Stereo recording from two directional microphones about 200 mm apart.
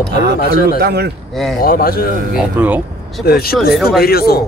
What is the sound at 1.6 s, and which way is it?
Speech, 45° left (ahead or behind).